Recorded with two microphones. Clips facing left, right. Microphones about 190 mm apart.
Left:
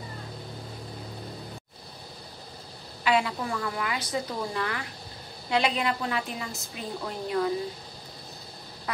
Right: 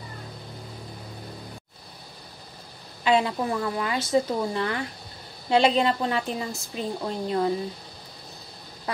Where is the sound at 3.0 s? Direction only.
25° right (ahead or behind).